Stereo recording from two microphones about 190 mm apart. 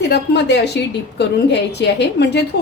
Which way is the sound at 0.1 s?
60° left (ahead or behind).